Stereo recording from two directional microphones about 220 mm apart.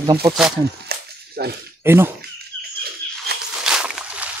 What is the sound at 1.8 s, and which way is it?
Speech, 10° right (ahead or behind).